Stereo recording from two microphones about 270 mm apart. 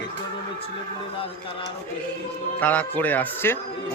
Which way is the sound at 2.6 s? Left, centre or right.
Centre.